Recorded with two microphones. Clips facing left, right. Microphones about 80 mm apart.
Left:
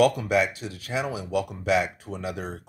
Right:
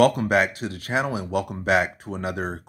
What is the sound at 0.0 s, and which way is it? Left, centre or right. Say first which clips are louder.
Speech: right 2 dB; right.